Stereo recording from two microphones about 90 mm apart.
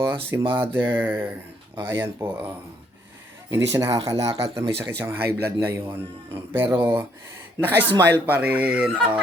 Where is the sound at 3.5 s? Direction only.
35° right (ahead or behind).